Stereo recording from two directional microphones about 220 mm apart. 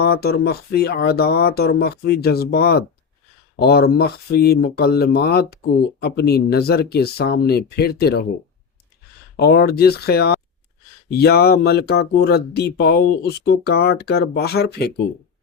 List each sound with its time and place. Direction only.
0.0 s speech: 45° left (ahead or behind)
9.3 s speech: 45° left (ahead or behind)